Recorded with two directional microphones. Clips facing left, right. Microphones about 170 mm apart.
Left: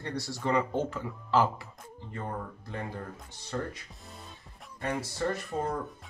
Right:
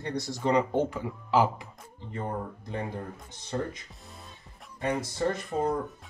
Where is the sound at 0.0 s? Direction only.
20° right (ahead or behind).